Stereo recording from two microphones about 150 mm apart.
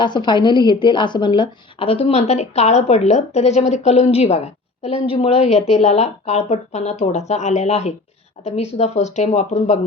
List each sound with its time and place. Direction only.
0.0 s a woman's voice: 30° left (ahead or behind); by 9.7 s 50° left (ahead or behind)